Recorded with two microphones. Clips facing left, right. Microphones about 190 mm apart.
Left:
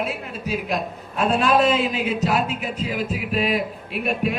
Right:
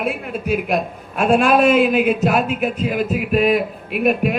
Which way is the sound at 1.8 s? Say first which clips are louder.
Right 7 dB; 50° right (ahead or behind).